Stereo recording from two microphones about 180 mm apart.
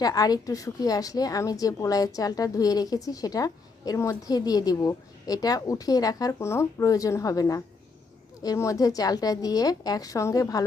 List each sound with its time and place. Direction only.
0.0 s a woman's voice: 20° left (ahead or behind)